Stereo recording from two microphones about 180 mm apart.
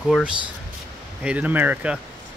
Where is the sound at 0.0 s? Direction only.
Centre (ahead or behind).